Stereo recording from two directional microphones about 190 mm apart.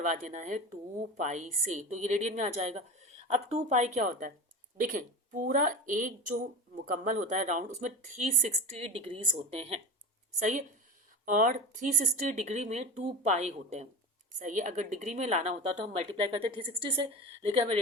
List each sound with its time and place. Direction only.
0.0 s speech: 40° right (ahead or behind)
11.3 s speech: 40° right (ahead or behind); by 17.5 s 25° right (ahead or behind)